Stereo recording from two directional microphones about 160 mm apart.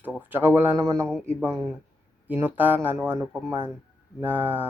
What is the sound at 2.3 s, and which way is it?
Speech, 10° right (ahead or behind).